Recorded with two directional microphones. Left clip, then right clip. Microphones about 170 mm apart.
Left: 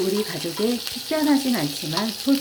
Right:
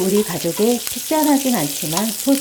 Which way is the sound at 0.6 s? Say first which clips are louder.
Right 6 dB; 10° right (ahead or behind).